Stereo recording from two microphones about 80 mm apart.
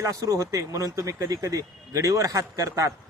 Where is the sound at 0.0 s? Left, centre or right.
Right.